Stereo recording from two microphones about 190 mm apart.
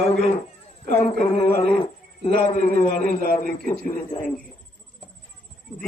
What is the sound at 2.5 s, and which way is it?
Speech, 40° left (ahead or behind).